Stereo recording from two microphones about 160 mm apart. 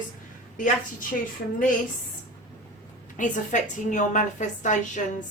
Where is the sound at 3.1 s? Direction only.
50° left (ahead or behind).